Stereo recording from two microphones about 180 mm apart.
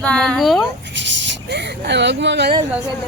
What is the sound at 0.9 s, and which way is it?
Speech, 85° right.